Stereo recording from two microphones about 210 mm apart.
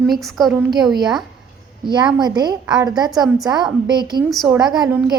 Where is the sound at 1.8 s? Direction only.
20° right (ahead or behind).